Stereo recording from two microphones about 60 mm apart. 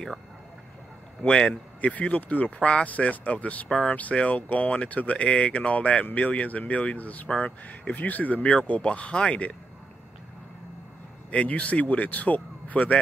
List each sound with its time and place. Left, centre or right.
1.2 s speech: centre
3.6 s speech: centre
11.2 s speech: left